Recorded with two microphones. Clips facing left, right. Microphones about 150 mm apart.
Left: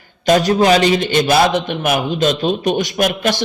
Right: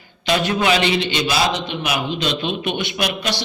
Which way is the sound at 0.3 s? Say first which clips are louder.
Left 6 dB; 40° left (ahead or behind).